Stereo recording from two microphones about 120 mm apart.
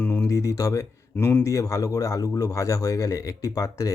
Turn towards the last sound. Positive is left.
turn(degrees=30)  # may be behind; listen again after turning